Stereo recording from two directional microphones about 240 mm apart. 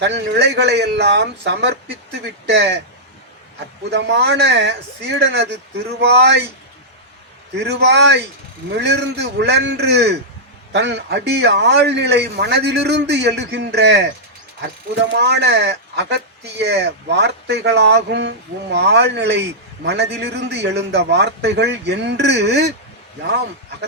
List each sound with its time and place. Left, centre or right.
0.0 s a man's voice: right
3.8 s a man's voice: right
7.5 s a man's voice: right
15.1 s a man's voice: right